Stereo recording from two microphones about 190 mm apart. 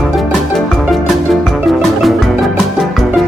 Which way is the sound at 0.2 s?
Centre (ahead or behind).